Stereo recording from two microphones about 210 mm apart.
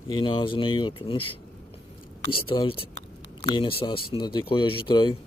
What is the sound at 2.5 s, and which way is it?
Speech, 25° left (ahead or behind).